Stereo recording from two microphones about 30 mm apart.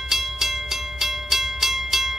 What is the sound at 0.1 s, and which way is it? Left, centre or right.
Music, centre.